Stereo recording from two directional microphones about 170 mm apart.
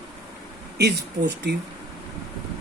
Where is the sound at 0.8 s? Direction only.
85° right.